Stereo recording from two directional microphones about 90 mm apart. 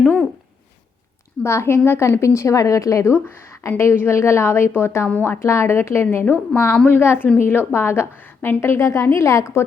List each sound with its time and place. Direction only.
1.5 s a woman's voice: 30° left (ahead or behind)
6.2 s a woman's voice: 15° left (ahead or behind)